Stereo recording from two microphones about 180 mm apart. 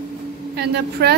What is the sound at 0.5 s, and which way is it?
Speech, 65° right (ahead or behind).